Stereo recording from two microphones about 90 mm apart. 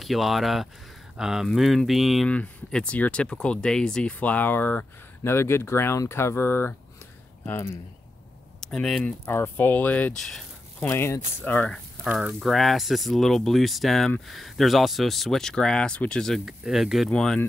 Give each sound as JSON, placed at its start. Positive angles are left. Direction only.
{"t": 0.0, "sound": "speech", "side_deg": 0}
{"t": 2.2, "sound": "speech", "side_deg": 15}
{"t": 8.5, "sound": "speech", "side_deg": 5}
{"t": 9.2, "sound": "speech", "side_deg": 25}
{"t": 10.1, "sound": "speech", "side_deg": 5}
{"t": 10.8, "sound": "speech", "side_deg": 30}
{"t": 12.0, "sound": "speech", "side_deg": -5}
{"t": 16.3, "sound": "speech", "side_deg": -5}
{"t": 17.1, "sound": "speech", "side_deg": 5}